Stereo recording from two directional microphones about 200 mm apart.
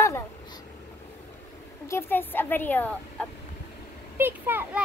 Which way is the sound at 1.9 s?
10° left (ahead or behind).